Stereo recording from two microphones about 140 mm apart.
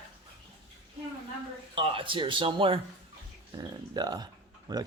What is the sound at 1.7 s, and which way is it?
Speech, 40° right (ahead or behind).